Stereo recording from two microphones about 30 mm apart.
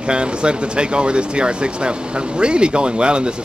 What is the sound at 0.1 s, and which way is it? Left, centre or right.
Speech, right.